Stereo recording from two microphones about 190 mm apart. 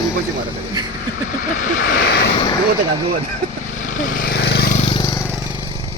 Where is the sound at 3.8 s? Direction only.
45° left (ahead or behind); by 4.7 s 60° left (ahead or behind).